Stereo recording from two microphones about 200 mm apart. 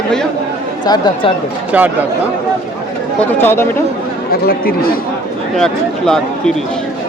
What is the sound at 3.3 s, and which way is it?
Speech, 10° left (ahead or behind).